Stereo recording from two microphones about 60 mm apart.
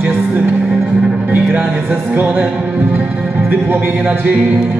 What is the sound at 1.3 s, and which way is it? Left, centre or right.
Music, right.